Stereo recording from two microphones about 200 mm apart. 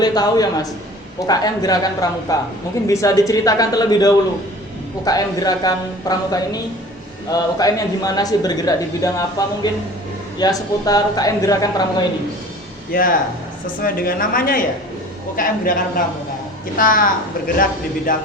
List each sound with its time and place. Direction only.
0.0 s speech: 20° left (ahead or behind)
10.3 s speech: 20° left (ahead or behind)
12.9 s speech: 45° left (ahead or behind)